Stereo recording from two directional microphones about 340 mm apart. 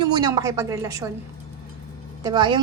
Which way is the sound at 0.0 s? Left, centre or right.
Centre.